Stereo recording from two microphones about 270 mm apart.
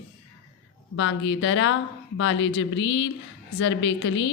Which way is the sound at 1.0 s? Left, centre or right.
Left.